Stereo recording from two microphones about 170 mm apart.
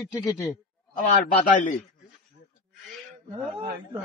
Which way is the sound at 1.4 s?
50° left (ahead or behind).